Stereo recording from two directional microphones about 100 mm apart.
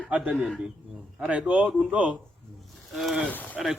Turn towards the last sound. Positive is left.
turn(degrees=15)  # may be behind; listen again after turning